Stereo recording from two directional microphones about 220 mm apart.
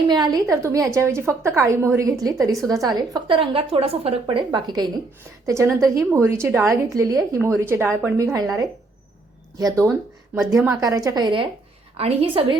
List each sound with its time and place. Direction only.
0.1 s a woman's voice: 15° right (ahead or behind)